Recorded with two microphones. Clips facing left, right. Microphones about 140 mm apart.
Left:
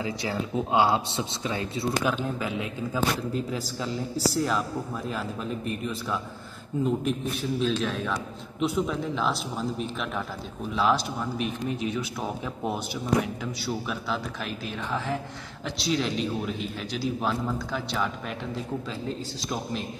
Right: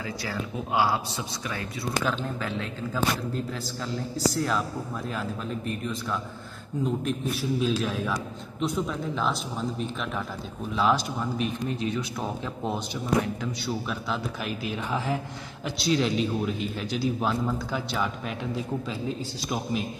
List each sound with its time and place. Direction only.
0.0 s speech: 20° left (ahead or behind)
2.0 s a man's voice: 10° left (ahead or behind); by 19.8 s 5° right (ahead or behind)